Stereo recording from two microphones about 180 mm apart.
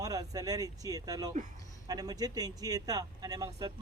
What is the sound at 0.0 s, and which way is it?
Speech, 20° right (ahead or behind).